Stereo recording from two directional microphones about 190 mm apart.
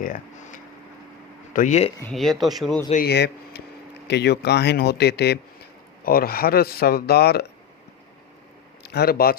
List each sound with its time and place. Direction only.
0.0 s speech: 45° left (ahead or behind)
2.0 s speech: 5° left (ahead or behind)
2.9 s speech: 55° left (ahead or behind)
8.8 s a man's voice: 60° left (ahead or behind)